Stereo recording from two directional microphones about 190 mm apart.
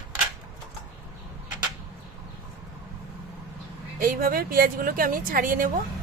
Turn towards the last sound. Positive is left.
turn(degrees=-45)  # may be behind; listen again after turning